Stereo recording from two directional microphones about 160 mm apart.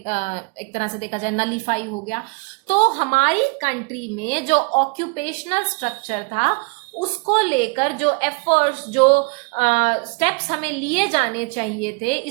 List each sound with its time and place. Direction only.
0.0 s a woman's voice: 45° left (ahead or behind)